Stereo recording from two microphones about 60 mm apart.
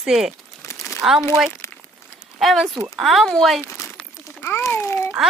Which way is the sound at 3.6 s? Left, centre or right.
Left.